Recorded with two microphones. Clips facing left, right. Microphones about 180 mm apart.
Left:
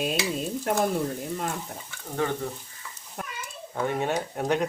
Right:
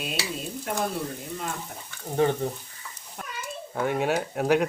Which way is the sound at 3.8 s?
5° right (ahead or behind).